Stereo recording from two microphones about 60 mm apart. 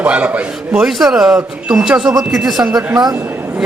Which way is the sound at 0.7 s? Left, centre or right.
Centre.